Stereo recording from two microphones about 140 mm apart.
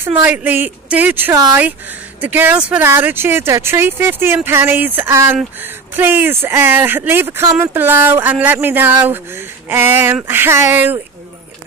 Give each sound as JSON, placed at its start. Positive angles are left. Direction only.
{"t": 0.2, "sound": "speech", "side_deg": -15}